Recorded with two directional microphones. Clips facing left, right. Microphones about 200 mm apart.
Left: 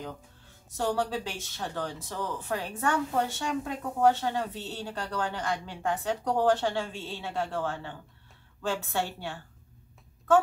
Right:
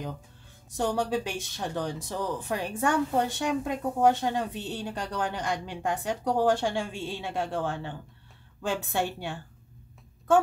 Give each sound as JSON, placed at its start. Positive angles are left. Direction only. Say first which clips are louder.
{"t": 0.7, "sound": "speech", "louder": "right 2 dB", "side_deg": -15}